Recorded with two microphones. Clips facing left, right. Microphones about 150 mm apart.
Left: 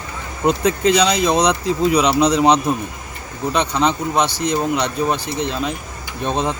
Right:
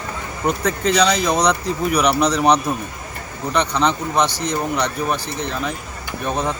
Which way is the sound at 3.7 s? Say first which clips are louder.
Left 1 dB; 10° left (ahead or behind).